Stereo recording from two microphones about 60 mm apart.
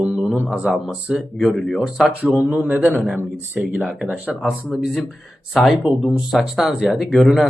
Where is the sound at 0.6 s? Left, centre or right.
Centre.